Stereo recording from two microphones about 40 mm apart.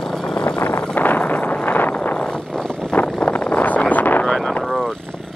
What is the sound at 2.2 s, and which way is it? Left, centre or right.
Vehicle, left.